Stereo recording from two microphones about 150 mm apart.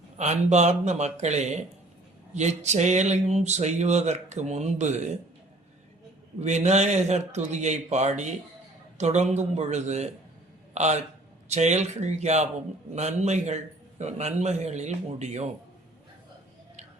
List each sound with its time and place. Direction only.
0.2 s speech: 50° right (ahead or behind)
6.4 s speech: 50° right (ahead or behind)